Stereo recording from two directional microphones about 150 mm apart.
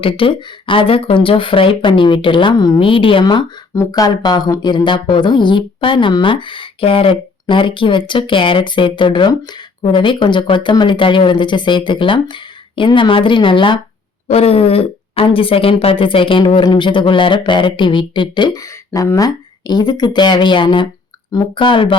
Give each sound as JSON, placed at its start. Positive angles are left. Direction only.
{"t": 0.0, "sound": "speech", "side_deg": 35}